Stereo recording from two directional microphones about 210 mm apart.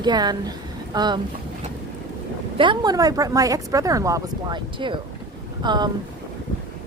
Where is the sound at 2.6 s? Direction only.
20° right (ahead or behind).